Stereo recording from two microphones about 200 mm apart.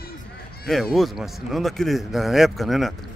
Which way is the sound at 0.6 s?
Centre (ahead or behind).